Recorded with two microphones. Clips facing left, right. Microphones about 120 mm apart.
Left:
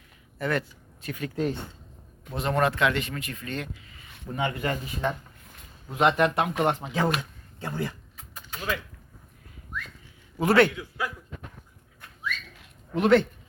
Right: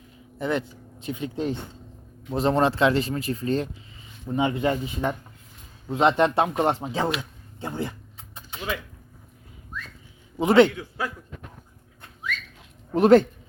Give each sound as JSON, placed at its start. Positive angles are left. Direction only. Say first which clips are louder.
{"t": 0.3, "sound": "speech", "louder": "right 2 dB", "side_deg": -20}
{"t": 2.3, "sound": "speech", "louder": "right 4 dB", "side_deg": -30}
{"t": 4.3, "sound": "speech", "louder": "right 5 dB", "side_deg": -20}
{"t": 5.9, "sound": "speech", "louder": "right 2 dB", "side_deg": -25}
{"t": 8.4, "sound": "a sound", "louder": "even", "side_deg": -25}
{"t": 10.3, "sound": "a man's voice", "louder": "right 4 dB", "side_deg": -20}
{"t": 12.9, "sound": "speech", "louder": "right 5 dB", "side_deg": -40}